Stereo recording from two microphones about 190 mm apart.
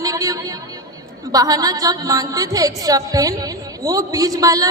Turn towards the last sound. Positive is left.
turn(degrees=-20)  # may be behind; listen again after turning